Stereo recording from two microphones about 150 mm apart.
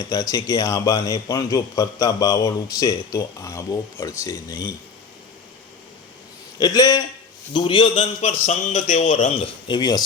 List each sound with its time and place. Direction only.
0.0 s speech: 25° left (ahead or behind)
6.6 s a man's voice: 25° left (ahead or behind); by 9.5 s 50° left (ahead or behind)
9.6 s speech: 30° left (ahead or behind)